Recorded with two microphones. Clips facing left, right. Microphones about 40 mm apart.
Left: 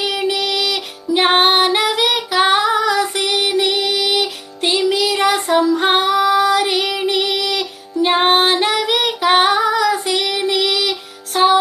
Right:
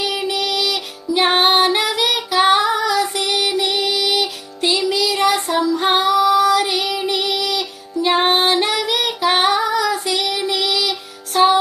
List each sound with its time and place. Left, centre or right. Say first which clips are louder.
0.0 s music: left 2 dB; left
8.0 s female singing: left 2 dB; left
10.7 s music: left 1 dB; left